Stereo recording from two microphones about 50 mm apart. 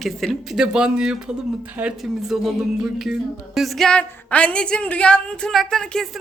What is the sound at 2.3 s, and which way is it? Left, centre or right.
Speech, centre.